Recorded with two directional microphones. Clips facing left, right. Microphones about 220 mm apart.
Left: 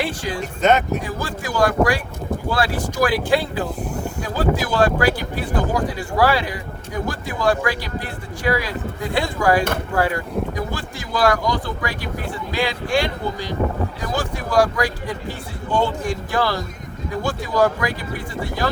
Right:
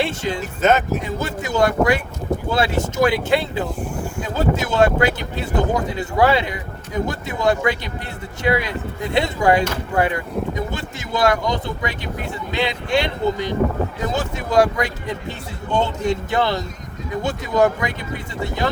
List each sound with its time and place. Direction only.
0.0 s speech: 25° right (ahead or behind)
0.6 s speech: centre (ahead or behind)
1.0 s speech: 25° right (ahead or behind)